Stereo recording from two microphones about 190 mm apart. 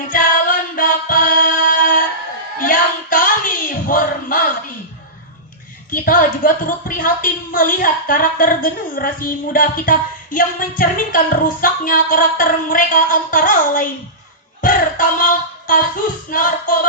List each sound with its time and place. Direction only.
0.1 s music: 45° left (ahead or behind)
2.6 s child singing: 45° left (ahead or behind)
5.9 s a woman's voice: 45° left (ahead or behind)
14.6 s music: 45° left (ahead or behind)
16.3 s a woman's voice: 45° left (ahead or behind)